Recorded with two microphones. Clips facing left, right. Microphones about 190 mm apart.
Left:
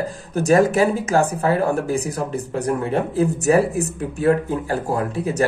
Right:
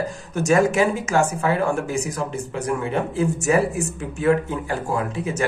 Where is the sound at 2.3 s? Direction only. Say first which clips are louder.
Left 3 dB; 60° left (ahead or behind).